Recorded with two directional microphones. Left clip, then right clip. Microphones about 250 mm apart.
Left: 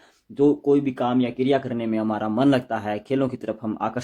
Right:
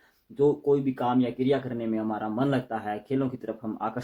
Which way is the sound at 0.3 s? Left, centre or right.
Left.